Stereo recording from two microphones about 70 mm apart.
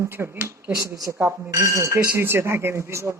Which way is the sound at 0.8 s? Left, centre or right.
Right.